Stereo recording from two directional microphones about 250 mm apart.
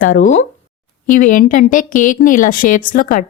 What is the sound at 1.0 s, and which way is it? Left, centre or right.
Speech, left.